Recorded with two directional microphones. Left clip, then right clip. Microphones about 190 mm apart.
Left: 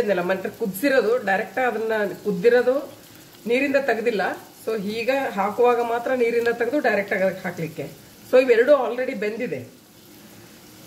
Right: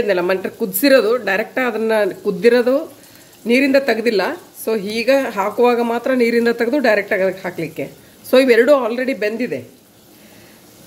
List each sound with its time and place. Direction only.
0.1 s a woman's voice: 55° right (ahead or behind)